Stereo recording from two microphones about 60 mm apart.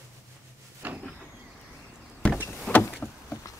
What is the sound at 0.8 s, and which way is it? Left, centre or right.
Vehicle, right.